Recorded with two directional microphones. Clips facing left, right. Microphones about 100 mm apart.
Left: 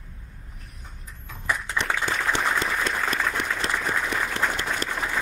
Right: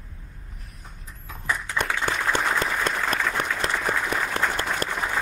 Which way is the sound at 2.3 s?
45° right (ahead or behind).